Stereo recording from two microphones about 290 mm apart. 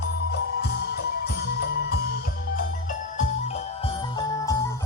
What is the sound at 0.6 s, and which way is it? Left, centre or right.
Music, left.